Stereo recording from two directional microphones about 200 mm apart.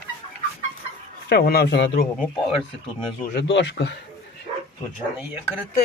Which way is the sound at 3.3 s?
60° left (ahead or behind).